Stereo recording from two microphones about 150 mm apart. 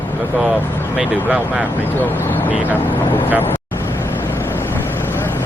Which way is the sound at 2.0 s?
15° left (ahead or behind).